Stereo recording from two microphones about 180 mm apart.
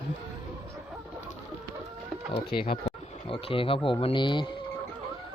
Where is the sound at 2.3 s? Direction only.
30° left (ahead or behind).